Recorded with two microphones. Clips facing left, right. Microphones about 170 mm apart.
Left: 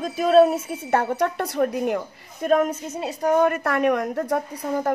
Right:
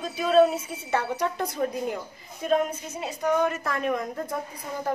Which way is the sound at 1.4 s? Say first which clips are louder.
Left 5 dB; 70° left (ahead or behind).